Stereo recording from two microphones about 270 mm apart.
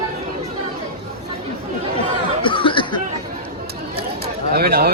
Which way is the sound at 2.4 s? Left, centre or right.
Centre.